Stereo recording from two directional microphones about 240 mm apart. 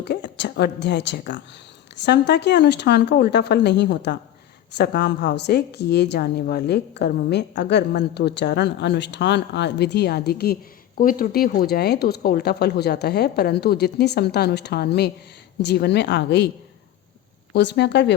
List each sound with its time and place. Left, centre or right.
0.0 s speech: left
17.5 s speech: left